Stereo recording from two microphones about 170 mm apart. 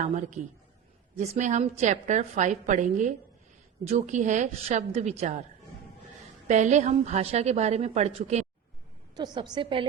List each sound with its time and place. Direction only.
0.0 s a woman's voice: 50° right (ahead or behind)
6.5 s a woman's voice: 45° right (ahead or behind)
9.1 s a woman's voice: 25° right (ahead or behind)